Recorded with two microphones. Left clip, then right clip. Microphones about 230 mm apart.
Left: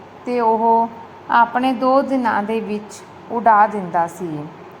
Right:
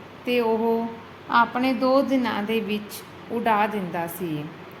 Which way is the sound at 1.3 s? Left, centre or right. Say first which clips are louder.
Left 6 dB; centre.